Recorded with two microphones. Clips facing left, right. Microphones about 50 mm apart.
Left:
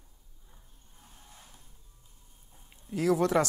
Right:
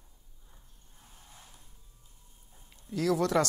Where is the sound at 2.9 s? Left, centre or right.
Left.